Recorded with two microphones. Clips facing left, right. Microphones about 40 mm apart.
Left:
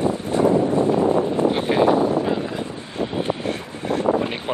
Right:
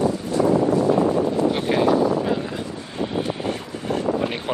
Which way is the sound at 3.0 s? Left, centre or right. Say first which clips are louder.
Left 1 dB; left.